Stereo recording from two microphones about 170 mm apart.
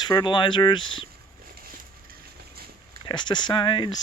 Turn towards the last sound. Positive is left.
turn(degrees=25)  # may be behind; listen again after turning